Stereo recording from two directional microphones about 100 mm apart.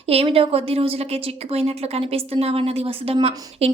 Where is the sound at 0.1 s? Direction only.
75° right (ahead or behind).